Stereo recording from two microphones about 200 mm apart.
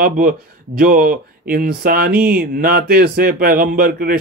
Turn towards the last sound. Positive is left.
turn(degrees=-45)  # may be behind; listen again after turning